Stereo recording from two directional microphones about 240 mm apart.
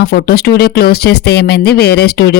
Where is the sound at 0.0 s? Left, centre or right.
Left.